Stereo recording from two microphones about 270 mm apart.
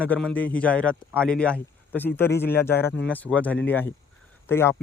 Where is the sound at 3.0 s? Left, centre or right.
Centre.